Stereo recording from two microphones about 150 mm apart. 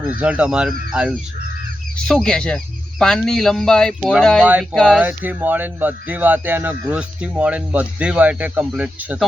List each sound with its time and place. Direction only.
0.1 s speech: 10° right (ahead or behind)
4.9 s speech: 10° right (ahead or behind)